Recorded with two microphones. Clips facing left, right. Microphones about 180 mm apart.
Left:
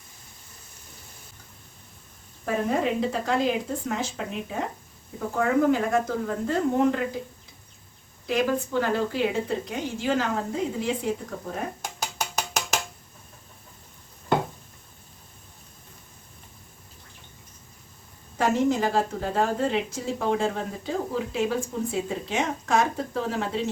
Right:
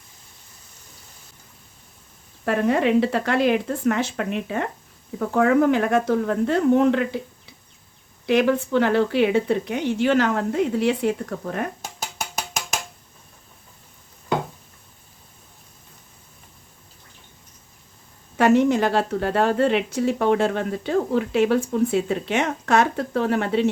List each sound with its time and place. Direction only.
2.4 s a woman's voice: 75° right (ahead or behind)
8.3 s a woman's voice: 70° right (ahead or behind)
18.3 s a woman's voice: 70° right (ahead or behind)